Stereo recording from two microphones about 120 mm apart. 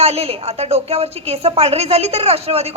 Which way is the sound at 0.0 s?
60° right (ahead or behind).